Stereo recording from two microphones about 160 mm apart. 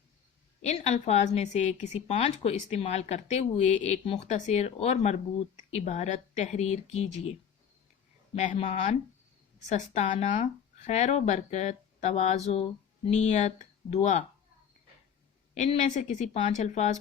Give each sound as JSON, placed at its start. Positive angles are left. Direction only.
{"t": 0.6, "sound": "a woman's voice", "side_deg": 45}
{"t": 8.4, "sound": "a woman's voice", "side_deg": 45}
{"t": 15.5, "sound": "a woman's voice", "side_deg": 45}